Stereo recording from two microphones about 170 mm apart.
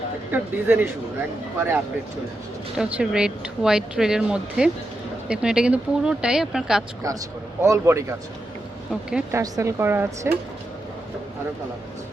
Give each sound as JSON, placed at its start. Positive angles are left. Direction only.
{"t": 0.3, "sound": "speech", "side_deg": -10}
{"t": 2.7, "sound": "a woman's voice", "side_deg": -5}
{"t": 7.6, "sound": "speech", "side_deg": -15}
{"t": 8.9, "sound": "a woman's voice", "side_deg": -5}
{"t": 9.3, "sound": "speech", "side_deg": -15}